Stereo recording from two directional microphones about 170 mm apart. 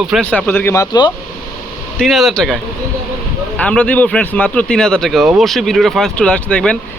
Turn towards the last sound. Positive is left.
turn(degrees=5)  # may be behind; listen again after turning